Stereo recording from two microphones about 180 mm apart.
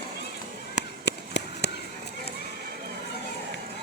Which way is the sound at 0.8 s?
70° left (ahead or behind).